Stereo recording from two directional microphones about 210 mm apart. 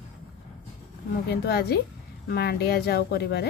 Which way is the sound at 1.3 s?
50° left (ahead or behind).